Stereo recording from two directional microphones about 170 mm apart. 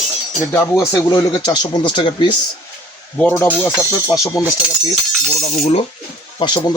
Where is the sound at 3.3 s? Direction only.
15° left (ahead or behind).